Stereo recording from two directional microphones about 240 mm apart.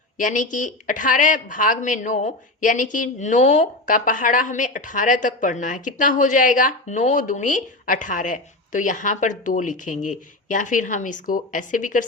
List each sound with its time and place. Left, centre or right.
0.2 s speech: left